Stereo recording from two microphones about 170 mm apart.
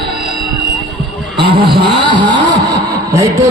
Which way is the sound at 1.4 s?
30° right (ahead or behind).